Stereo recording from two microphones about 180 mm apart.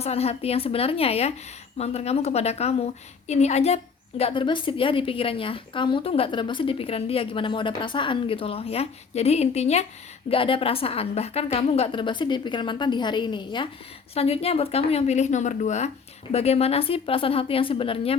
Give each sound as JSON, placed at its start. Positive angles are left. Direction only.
{"t": 0.0, "sound": "a woman's voice", "side_deg": 35}